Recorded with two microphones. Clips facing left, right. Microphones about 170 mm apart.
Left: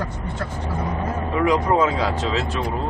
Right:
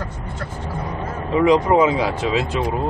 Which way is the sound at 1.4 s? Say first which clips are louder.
Right 4 dB; 20° right (ahead or behind).